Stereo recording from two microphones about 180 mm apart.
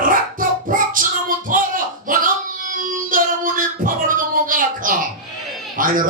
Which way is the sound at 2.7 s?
50° right (ahead or behind).